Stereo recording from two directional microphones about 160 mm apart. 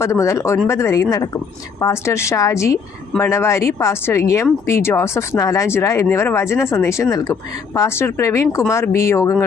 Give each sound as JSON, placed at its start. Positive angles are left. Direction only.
{"t": 0.0, "sound": "speech", "side_deg": 20}